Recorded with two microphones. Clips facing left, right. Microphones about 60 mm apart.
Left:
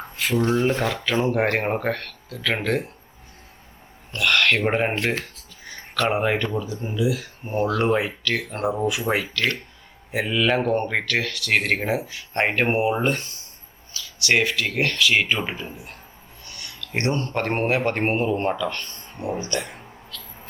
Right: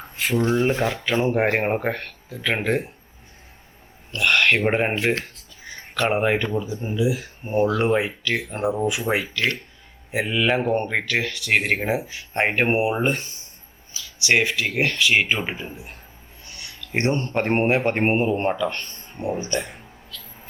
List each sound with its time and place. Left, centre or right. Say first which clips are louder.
0.2 s speech: even; centre
4.2 s speech: right 1 dB; centre
8.6 s speech: right 1 dB; centre
9.3 s speech: even; centre
16.5 s a sound: right 2 dB; centre
17.5 s speech: right 3 dB; right
18.7 s a sound: even; right
19.4 s speech: right 1 dB; right